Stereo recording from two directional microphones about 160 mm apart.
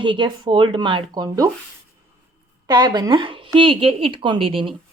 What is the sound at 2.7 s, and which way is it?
A woman's voice, 25° right (ahead or behind).